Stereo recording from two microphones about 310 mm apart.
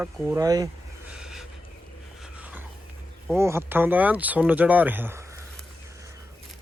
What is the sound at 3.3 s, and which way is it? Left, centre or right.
Speech, centre.